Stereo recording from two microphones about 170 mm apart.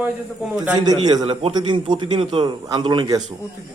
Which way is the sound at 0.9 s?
25° right (ahead or behind).